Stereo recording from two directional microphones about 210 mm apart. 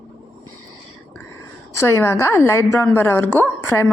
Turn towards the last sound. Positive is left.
turn(degrees=10)  # may be behind; listen again after turning